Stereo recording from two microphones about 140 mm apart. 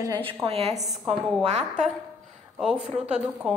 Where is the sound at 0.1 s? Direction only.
40° right (ahead or behind).